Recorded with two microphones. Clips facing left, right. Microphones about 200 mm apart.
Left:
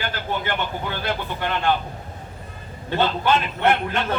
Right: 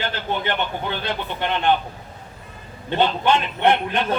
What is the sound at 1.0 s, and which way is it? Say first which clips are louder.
Speech: even; 20° right (ahead or behind).